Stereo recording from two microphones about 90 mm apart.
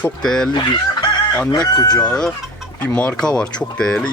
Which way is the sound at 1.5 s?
50° left (ahead or behind).